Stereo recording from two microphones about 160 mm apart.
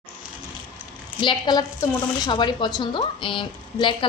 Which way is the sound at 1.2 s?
30° left (ahead or behind).